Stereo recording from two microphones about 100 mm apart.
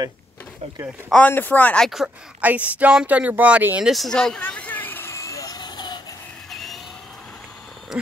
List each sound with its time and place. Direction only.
1.1 s speech: 15° left (ahead or behind)
2.4 s speech: 15° right (ahead or behind)
3.9 s vehicle: 5° left (ahead or behind); by 5.9 s 50° left (ahead or behind)
6.5 s vehicle: centre (ahead or behind)
7.9 s a sound: 5° right (ahead or behind)